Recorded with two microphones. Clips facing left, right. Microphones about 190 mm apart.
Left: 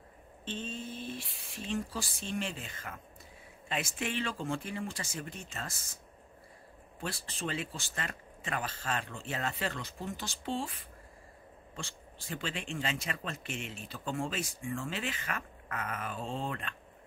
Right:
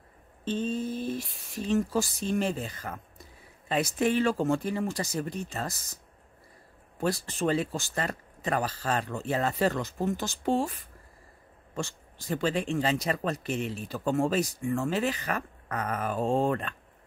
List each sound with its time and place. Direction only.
0.5 s speech: 40° right (ahead or behind)
7.0 s speech: 45° right (ahead or behind)